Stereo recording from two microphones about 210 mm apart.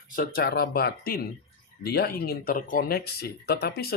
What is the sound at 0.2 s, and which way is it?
A man's voice, 45° left (ahead or behind).